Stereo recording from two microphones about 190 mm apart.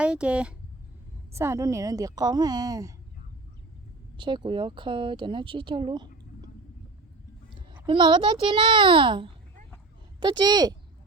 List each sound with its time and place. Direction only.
0.0 s a woman's voice: 5° right (ahead or behind)
4.2 s speech: 25° right (ahead or behind)
7.9 s speech: 25° right (ahead or behind)